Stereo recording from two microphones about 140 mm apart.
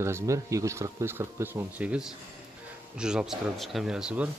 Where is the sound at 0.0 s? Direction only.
20° right (ahead or behind).